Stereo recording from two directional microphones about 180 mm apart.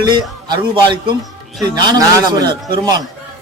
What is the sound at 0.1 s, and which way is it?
A man's voice, 25° right (ahead or behind).